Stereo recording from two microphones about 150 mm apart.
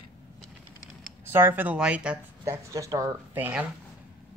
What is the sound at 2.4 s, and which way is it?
Speech, 20° right (ahead or behind).